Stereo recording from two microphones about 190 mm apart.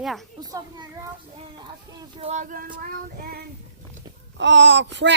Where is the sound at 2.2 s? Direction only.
40° right (ahead or behind); by 3.5 s 55° right (ahead or behind).